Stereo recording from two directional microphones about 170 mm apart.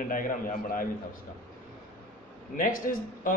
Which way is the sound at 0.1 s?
55° left (ahead or behind).